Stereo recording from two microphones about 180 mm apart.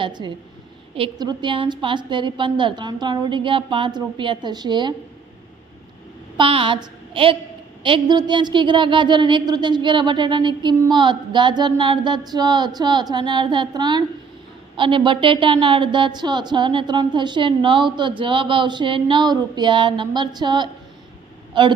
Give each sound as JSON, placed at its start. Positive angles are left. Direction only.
{"t": 0.0, "sound": "a woman's voice", "side_deg": -25}
{"t": 6.3, "sound": "a woman's voice", "side_deg": -30}